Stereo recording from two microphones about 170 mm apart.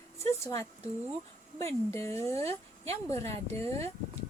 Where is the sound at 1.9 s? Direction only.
15° left (ahead or behind).